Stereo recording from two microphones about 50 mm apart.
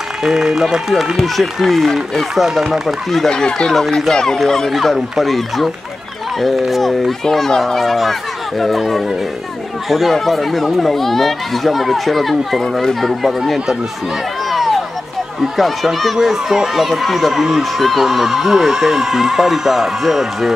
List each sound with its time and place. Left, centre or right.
0.2 s speech: centre
3.3 s speech: centre
3.7 s speech: centre
4.1 s speech: centre
14.5 s a sound: centre
15.5 s speech: centre